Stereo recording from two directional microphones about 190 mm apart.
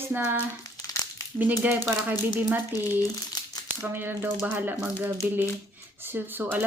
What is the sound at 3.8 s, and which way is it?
Speech, 10° right (ahead or behind).